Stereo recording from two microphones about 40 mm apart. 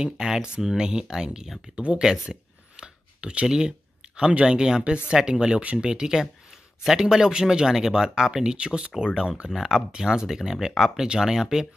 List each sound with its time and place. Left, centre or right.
0.0 s speech: centre
1.8 s speech: right
4.3 s speech: right
4.6 s speech: centre
8.9 s speech: centre